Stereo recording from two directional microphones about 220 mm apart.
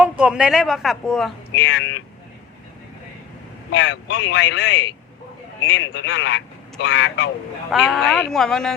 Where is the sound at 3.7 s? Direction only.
55° left (ahead or behind).